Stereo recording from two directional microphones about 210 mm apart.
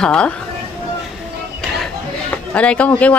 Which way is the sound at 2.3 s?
5° left (ahead or behind).